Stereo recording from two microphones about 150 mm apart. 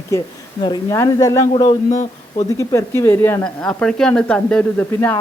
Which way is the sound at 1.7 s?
50° left (ahead or behind).